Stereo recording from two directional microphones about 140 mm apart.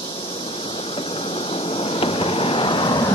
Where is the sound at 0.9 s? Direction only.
40° left (ahead or behind).